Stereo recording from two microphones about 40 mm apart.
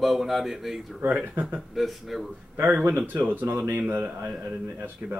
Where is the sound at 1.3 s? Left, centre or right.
Right.